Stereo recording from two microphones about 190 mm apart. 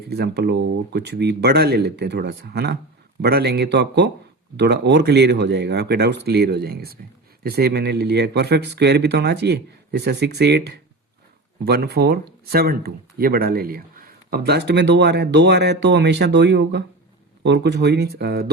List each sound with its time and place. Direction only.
0.1 s speech: 60° right (ahead or behind)